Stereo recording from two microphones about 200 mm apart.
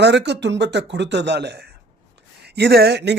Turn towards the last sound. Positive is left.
turn(degrees=-55)  # may be behind; listen again after turning